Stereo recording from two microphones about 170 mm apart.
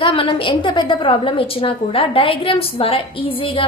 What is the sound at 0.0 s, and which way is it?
A woman's voice, 30° left (ahead or behind).